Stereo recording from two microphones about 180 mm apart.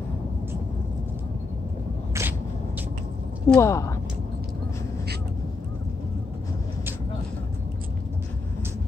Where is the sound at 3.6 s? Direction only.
15° left (ahead or behind).